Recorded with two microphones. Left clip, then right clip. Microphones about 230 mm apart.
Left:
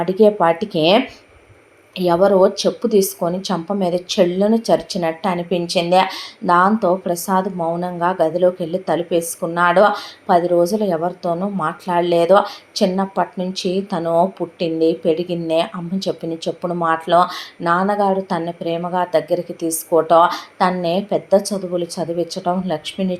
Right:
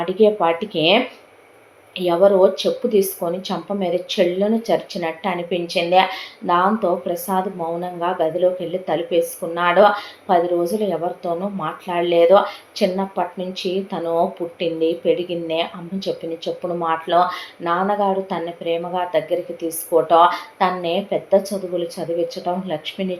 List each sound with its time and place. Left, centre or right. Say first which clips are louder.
0.0 s speech: left 2 dB; left